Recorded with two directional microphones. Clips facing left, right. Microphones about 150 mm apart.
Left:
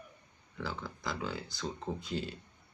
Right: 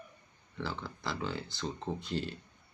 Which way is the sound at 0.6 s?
5° left (ahead or behind).